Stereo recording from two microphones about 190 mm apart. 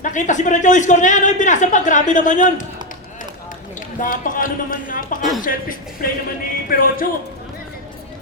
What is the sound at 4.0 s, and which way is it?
Speech, 45° left (ahead or behind).